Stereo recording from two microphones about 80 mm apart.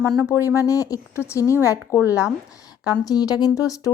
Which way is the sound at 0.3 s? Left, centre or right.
Left.